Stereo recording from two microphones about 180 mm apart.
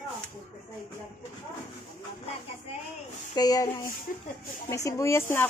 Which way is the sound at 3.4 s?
20° left (ahead or behind).